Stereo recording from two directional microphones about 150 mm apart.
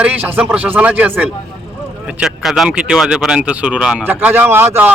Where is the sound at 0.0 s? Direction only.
10° right (ahead or behind).